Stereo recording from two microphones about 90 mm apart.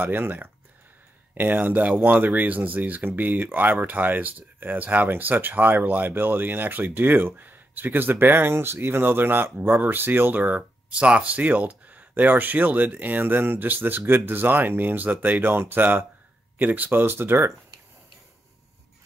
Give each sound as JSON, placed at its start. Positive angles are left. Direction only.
{"t": 0.0, "sound": "speech", "side_deg": -20}